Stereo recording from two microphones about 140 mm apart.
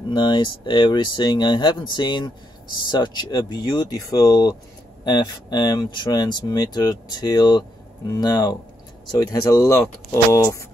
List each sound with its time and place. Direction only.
0.1 s speech: 35° left (ahead or behind)